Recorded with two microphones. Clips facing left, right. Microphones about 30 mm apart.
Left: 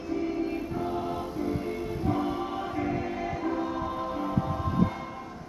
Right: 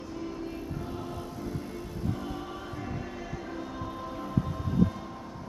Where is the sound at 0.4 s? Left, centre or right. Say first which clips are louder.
Left 7 dB; left.